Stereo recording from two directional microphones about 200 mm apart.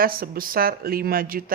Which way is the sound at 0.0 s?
45° right (ahead or behind).